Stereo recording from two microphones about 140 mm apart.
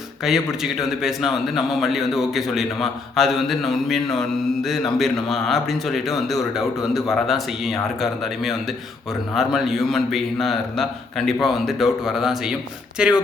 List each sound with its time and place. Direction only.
0.3 s a man's voice: 5° right (ahead or behind)